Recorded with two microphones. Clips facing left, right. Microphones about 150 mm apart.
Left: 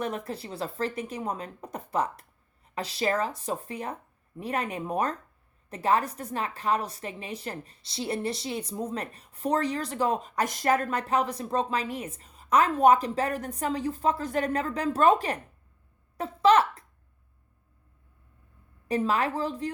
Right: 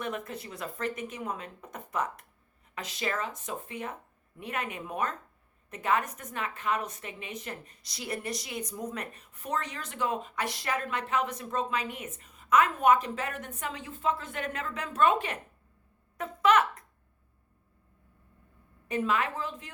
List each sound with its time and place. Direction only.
0.0 s a woman's voice: 35° left (ahead or behind)
18.9 s a woman's voice: 35° left (ahead or behind)